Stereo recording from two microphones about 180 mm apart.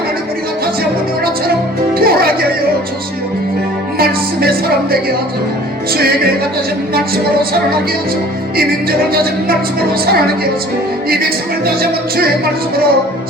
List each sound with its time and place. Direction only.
2.0 s music: 60° right (ahead or behind)
3.9 s music: 55° right (ahead or behind)
8.5 s music: 55° right (ahead or behind)
11.1 s music: 55° right (ahead or behind)